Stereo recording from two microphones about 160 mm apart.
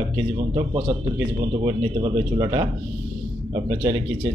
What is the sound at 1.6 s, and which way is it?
Speech, 30° right (ahead or behind).